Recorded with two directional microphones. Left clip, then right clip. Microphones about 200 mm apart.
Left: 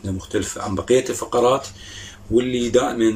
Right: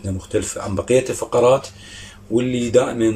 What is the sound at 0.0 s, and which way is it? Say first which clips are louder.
A man's voice: right 2 dB; 5° right (ahead or behind).